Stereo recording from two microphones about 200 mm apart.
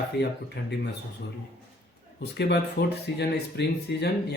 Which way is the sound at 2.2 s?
55° left (ahead or behind).